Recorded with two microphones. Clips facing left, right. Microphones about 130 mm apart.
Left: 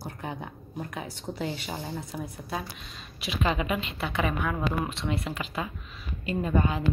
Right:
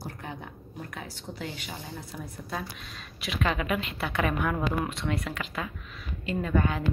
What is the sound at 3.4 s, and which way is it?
Speech, 30° left (ahead or behind).